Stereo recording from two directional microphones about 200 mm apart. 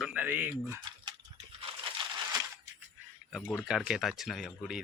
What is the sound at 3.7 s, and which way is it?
A man's voice, 5° right (ahead or behind).